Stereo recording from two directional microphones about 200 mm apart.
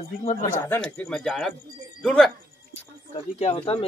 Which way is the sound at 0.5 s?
10° left (ahead or behind).